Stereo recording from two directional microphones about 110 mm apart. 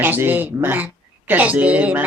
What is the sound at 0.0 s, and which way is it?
Speech, 15° right (ahead or behind).